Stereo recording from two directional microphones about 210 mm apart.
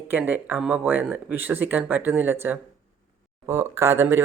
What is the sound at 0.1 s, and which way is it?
Speech, 10° right (ahead or behind).